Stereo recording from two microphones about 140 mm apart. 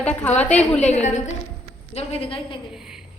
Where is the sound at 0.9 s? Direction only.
55° left (ahead or behind).